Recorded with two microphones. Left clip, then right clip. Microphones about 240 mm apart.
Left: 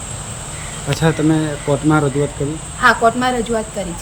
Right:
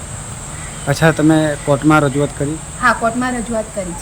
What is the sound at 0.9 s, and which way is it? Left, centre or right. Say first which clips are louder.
Speech: right 4 dB; centre.